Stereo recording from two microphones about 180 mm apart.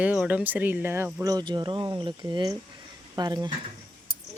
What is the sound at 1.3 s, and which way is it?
Speech, 25° right (ahead or behind).